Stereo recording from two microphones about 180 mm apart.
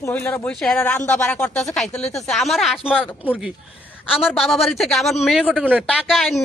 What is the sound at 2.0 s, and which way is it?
Speech, 35° left (ahead or behind).